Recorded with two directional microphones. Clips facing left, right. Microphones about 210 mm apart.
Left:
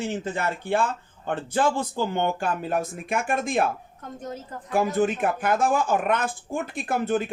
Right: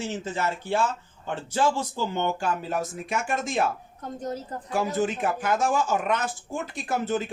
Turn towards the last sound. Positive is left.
turn(degrees=55)  # may be behind; listen again after turning